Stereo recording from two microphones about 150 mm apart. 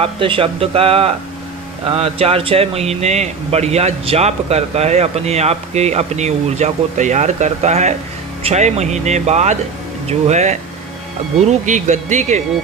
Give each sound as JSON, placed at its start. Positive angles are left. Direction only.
{"t": 0.0, "sound": "speech", "side_deg": -35}